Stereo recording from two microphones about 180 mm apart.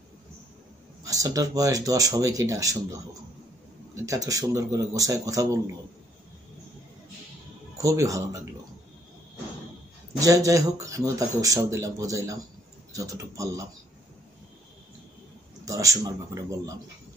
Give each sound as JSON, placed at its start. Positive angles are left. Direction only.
{"t": 1.0, "sound": "speech", "side_deg": -20}
{"t": 7.7, "sound": "speech", "side_deg": -20}
{"t": 10.2, "sound": "speech", "side_deg": -20}
{"t": 15.6, "sound": "speech", "side_deg": -20}